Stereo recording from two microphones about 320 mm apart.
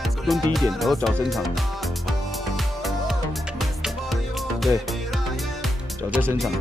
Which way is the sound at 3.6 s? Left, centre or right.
Centre.